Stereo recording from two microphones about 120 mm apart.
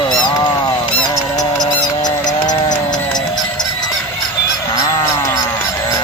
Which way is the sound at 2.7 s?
35° left (ahead or behind).